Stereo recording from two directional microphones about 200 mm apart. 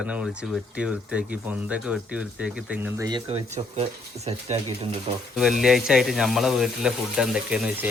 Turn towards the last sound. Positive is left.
turn(degrees=-5)  # may be behind; listen again after turning